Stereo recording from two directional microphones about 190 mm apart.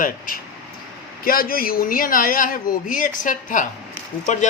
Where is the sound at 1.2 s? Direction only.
50° left (ahead or behind).